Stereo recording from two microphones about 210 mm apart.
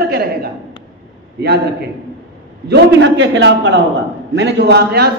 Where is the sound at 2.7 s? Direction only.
55° right (ahead or behind).